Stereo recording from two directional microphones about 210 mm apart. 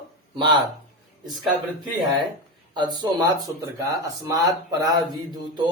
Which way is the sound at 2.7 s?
20° right (ahead or behind).